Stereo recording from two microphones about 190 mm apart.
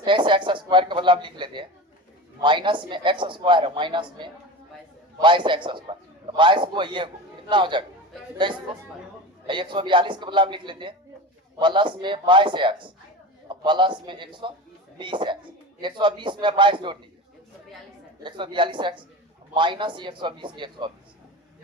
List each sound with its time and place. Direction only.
0.0 s a woman's voice: 25° right (ahead or behind)
18.2 s a woman's voice: 25° right (ahead or behind)